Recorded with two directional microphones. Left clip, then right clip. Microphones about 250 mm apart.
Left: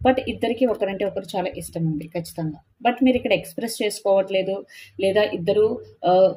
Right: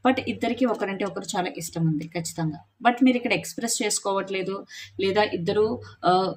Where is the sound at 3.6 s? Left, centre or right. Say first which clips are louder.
Left 3 dB; right.